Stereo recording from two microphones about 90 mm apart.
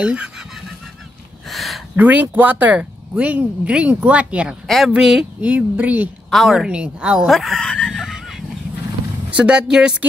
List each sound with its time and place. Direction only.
0.0 s speech: 10° right (ahead or behind)
1.5 s a sound: centre (ahead or behind)
2.0 s speech: 20° right (ahead or behind)
4.6 s speech: centre (ahead or behind)
5.4 s speech: 15° right (ahead or behind)
6.3 s speech: 5° right (ahead or behind)
7.9 s a sound: 5° right (ahead or behind)
9.3 s speech: 10° right (ahead or behind)